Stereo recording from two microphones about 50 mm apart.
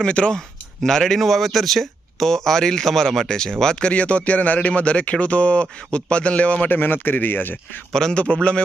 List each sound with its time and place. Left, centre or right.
0.0 s speech: left
0.3 s speech: centre
6.7 s a man's voice: left
8.1 s speech: left